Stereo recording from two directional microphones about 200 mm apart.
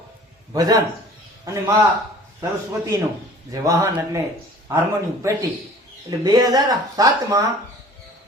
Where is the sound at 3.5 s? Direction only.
15° right (ahead or behind).